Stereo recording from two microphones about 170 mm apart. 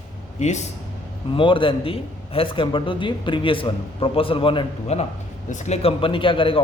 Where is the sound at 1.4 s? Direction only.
30° left (ahead or behind).